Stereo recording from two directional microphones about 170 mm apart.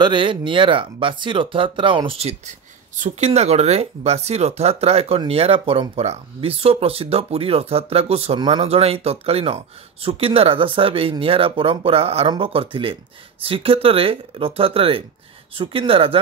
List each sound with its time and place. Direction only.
0.0 s speech: 30° right (ahead or behind)